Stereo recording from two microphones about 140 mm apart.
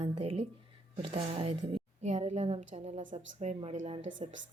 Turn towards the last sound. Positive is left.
turn(degrees=-60)  # may be behind; listen again after turning